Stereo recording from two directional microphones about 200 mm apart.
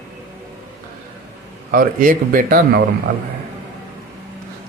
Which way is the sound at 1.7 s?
45° right (ahead or behind).